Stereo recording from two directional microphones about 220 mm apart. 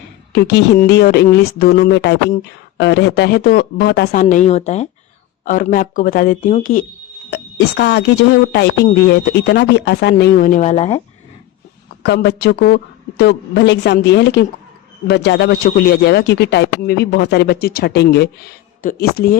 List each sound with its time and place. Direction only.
0.3 s speech: 50° left (ahead or behind); by 11.0 s 30° left (ahead or behind)
12.0 s speech: 50° left (ahead or behind)